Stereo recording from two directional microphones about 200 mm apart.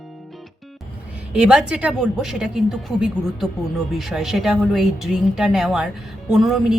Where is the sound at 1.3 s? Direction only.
5° right (ahead or behind).